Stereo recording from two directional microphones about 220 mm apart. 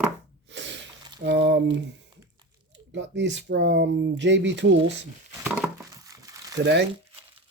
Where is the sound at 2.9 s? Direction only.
55° right (ahead or behind).